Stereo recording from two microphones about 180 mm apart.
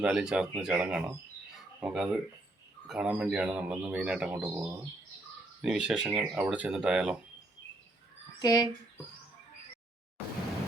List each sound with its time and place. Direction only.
0.0 s speech: 5° right (ahead or behind)
8.4 s speech: 20° left (ahead or behind)